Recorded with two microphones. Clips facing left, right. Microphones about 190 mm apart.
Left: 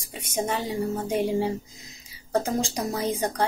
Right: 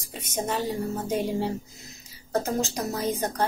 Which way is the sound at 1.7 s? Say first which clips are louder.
Right 1 dB; 90° left.